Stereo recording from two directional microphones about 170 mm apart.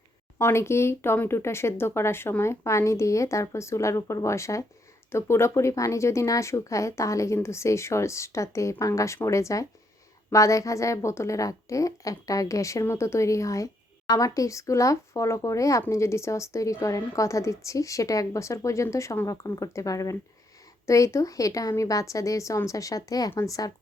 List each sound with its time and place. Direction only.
0.3 s a woman's voice: 15° left (ahead or behind)